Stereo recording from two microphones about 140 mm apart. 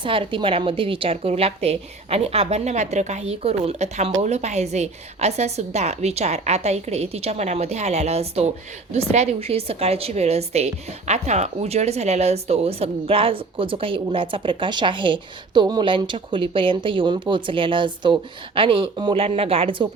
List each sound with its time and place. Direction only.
0.0 s a woman's voice: 40° right (ahead or behind)